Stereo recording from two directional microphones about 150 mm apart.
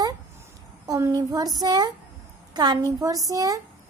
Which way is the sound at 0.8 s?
25° right (ahead or behind).